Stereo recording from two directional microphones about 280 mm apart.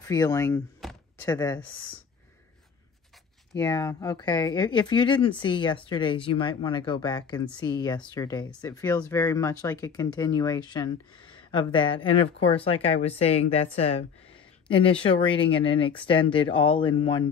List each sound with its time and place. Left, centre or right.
0.1 s speech: centre
0.8 s a sound: centre
1.2 s speech: centre
3.5 s speech: centre